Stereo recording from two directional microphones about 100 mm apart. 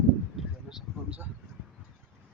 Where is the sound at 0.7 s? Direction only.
5° right (ahead or behind).